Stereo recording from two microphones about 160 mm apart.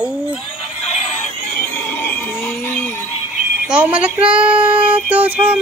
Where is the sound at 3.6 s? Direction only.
5° right (ahead or behind).